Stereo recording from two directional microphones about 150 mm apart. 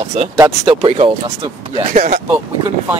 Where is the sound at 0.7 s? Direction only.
35° right (ahead or behind).